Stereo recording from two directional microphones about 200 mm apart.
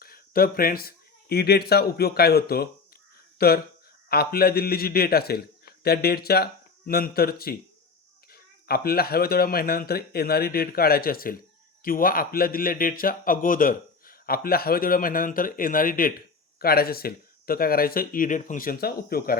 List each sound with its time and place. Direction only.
0.0 s a man's voice: 45° left (ahead or behind)